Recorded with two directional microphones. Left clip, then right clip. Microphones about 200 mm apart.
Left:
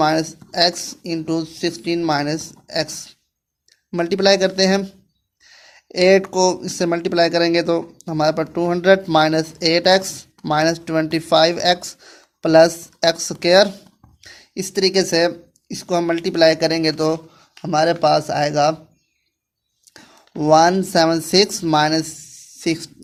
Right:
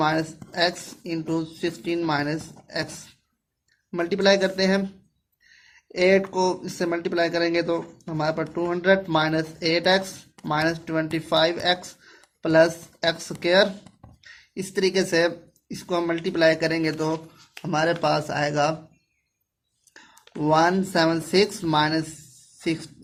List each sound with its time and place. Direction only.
0.0 s speech: 45° left (ahead or behind)
19.9 s speech: 45° left (ahead or behind)